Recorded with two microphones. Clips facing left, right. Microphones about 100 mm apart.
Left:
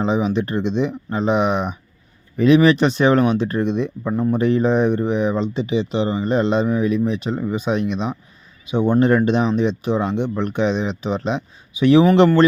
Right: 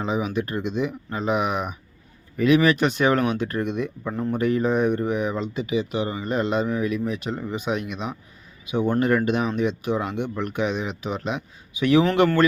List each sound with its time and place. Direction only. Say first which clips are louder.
0.0 s speech: left 6 dB; 25° left (ahead or behind)